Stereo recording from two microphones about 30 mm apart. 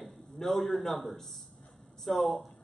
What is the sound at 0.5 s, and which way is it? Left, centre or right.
A man's voice, centre.